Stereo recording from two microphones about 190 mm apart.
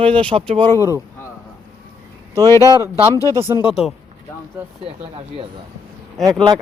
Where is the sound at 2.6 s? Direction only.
15° right (ahead or behind).